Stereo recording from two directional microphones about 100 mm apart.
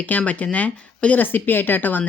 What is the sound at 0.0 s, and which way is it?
Speech, 15° left (ahead or behind).